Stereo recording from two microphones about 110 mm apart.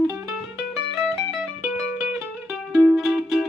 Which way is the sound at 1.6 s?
20° right (ahead or behind).